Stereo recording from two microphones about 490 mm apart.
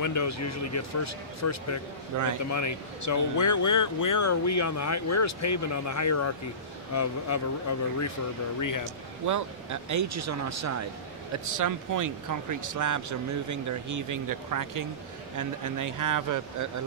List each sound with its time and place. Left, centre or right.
0.0 s speech: left
2.1 s speech: right
2.5 s speech: left
8.5 s speech: left
9.2 s speech: right